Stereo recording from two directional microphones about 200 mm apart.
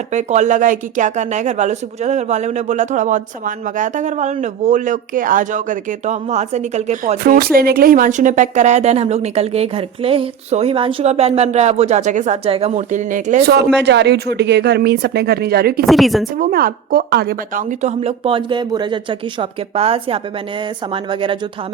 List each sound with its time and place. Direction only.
0.1 s speech: 35° right (ahead or behind)
13.8 s speech: 60° right (ahead or behind)
15.9 s a woman's voice: centre (ahead or behind)
16.4 s a woman's voice: 50° right (ahead or behind); by 21.3 s 25° right (ahead or behind)